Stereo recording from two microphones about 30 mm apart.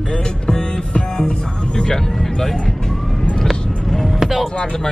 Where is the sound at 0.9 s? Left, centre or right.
Left.